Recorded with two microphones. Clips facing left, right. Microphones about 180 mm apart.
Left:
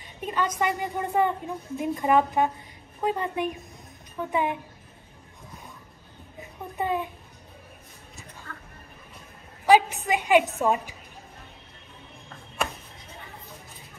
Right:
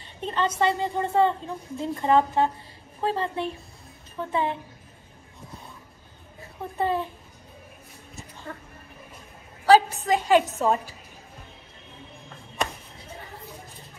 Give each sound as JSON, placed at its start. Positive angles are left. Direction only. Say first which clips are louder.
{"t": 0.0, "sound": "a woman's voice", "louder": "right 1 dB", "side_deg": 10}
{"t": 6.4, "sound": "speech", "louder": "right 3 dB", "side_deg": 15}
{"t": 8.5, "sound": "speech", "louder": "right 7 dB", "side_deg": -25}
{"t": 9.7, "sound": "a woman's voice", "louder": "right 2 dB", "side_deg": 15}